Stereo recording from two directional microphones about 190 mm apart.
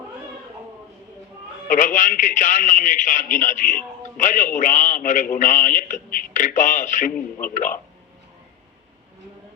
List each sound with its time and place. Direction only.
1.6 s a man's voice: 45° left (ahead or behind)